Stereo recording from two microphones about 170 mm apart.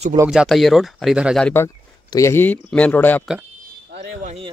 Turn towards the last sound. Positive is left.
turn(degrees=-35)  # may be behind; listen again after turning